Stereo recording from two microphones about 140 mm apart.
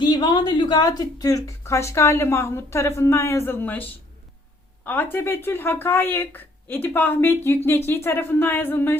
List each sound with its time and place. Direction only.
0.0 s speech: 30° left (ahead or behind); by 9.0 s 15° left (ahead or behind)